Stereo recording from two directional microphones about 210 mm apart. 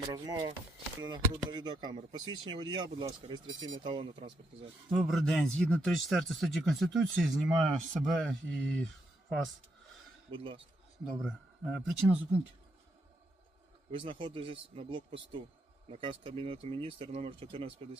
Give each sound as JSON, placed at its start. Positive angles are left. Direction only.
{"t": 0.1, "sound": "speech", "side_deg": -20}
{"t": 4.9, "sound": "speech", "side_deg": -5}
{"t": 10.3, "sound": "speech", "side_deg": -25}
{"t": 11.0, "sound": "speech", "side_deg": 0}
{"t": 14.0, "sound": "speech", "side_deg": -25}